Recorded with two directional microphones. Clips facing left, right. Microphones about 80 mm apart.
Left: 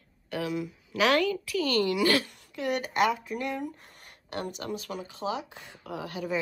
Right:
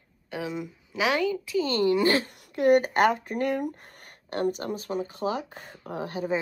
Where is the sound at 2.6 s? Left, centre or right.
Right.